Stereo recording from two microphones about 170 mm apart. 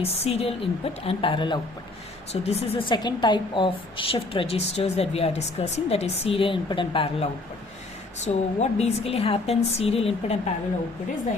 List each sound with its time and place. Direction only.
0.0 s a woman's voice: 35° left (ahead or behind)
2.9 s a woman's voice: 25° left (ahead or behind)